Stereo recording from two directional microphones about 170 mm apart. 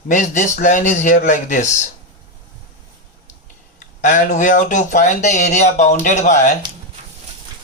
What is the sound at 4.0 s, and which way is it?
Speech, 45° left (ahead or behind).